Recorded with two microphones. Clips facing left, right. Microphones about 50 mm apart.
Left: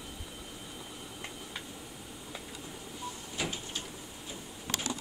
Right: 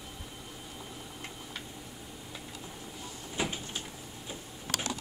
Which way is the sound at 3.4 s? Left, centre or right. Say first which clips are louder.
Right 3 dB; right.